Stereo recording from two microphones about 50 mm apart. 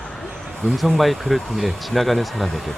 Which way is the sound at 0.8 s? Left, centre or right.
Centre.